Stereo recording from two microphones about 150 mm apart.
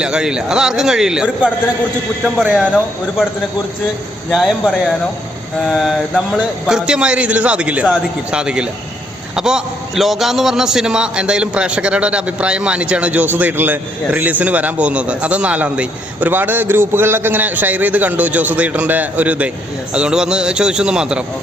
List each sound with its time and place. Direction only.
0.0 s a man's voice: 5° right (ahead or behind)
4.3 s a man's voice: centre (ahead or behind)